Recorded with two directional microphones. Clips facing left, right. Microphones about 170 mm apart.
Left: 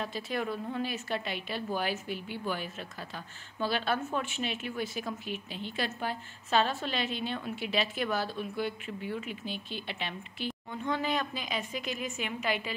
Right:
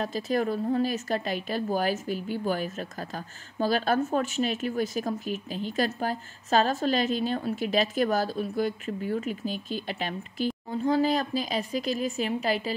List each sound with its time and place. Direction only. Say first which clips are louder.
0.0 s a woman's voice: right 7 dB; 40° right (ahead or behind)